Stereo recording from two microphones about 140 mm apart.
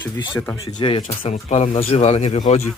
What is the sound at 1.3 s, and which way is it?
Speech, 55° left (ahead or behind).